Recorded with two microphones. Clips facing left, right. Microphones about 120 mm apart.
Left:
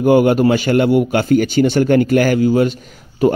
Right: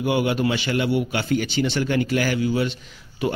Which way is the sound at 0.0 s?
45° left (ahead or behind).